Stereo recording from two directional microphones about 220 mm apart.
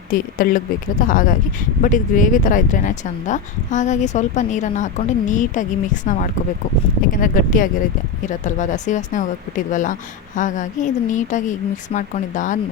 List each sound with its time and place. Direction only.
0.1 s speech: 40° left (ahead or behind)